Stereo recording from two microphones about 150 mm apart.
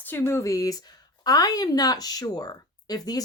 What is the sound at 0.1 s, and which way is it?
Speech, 20° left (ahead or behind).